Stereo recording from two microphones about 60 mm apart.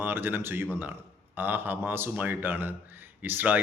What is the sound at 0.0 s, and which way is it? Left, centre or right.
Speech, right.